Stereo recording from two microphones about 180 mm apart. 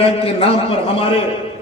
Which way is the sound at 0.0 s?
35° left (ahead or behind).